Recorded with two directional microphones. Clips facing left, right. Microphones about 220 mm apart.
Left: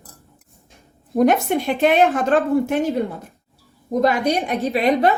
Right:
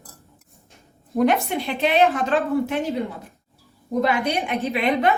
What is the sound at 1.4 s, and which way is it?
A woman's voice, 45° left (ahead or behind).